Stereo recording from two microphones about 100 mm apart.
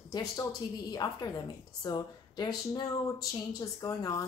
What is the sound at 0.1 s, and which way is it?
Speech, 35° left (ahead or behind).